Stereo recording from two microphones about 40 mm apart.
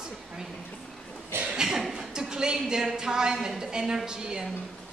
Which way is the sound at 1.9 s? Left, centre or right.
Centre.